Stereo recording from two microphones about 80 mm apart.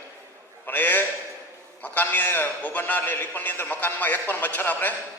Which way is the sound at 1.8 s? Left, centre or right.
Left.